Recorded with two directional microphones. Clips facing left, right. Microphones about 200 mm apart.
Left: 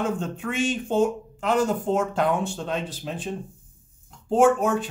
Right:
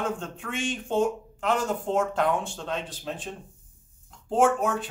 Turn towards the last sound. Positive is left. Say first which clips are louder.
# left 4 dB
turn(degrees=0)  # may be behind; listen again after turning